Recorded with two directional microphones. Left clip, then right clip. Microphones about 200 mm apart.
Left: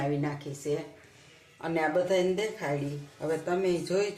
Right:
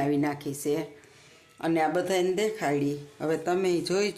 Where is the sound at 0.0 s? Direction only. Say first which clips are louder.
Right 4 dB; 50° right (ahead or behind).